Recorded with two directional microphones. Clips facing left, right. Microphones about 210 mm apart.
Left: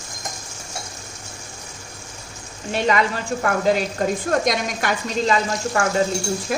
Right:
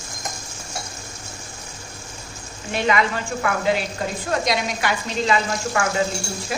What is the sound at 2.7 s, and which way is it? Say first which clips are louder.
Speech: left 1 dB; 35° left (ahead or behind).